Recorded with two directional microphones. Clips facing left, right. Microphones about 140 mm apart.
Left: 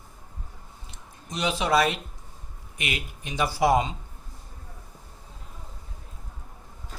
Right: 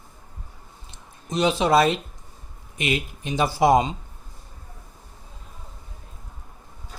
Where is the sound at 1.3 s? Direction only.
25° right (ahead or behind).